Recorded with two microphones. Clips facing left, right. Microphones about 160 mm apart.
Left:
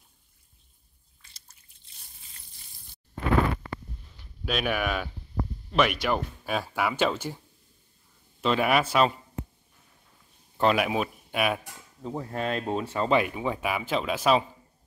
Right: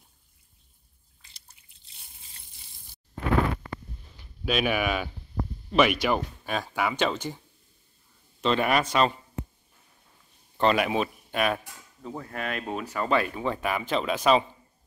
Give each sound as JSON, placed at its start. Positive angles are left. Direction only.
{"t": 4.2, "sound": "speech", "side_deg": -5}
{"t": 10.6, "sound": "speech", "side_deg": 5}
{"t": 12.0, "sound": "speech", "side_deg": 20}